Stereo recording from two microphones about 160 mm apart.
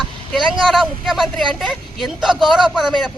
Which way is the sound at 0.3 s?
Centre (ahead or behind).